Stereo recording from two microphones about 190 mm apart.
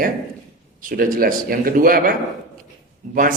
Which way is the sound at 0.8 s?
45° right (ahead or behind).